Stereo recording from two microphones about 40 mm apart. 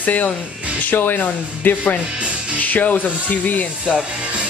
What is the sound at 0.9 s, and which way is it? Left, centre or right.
A man's voice, left.